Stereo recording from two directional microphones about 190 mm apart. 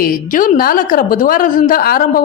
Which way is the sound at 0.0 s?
45° left (ahead or behind).